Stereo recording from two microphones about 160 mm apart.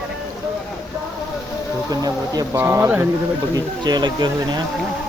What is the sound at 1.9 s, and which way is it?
Speech, 20° right (ahead or behind).